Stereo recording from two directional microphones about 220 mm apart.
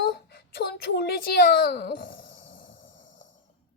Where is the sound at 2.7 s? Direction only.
60° left (ahead or behind).